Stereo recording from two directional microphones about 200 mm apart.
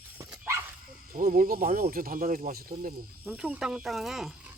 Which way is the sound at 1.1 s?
40° right (ahead or behind).